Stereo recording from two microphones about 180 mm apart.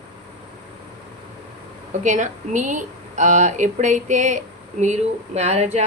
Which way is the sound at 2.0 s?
40° right (ahead or behind).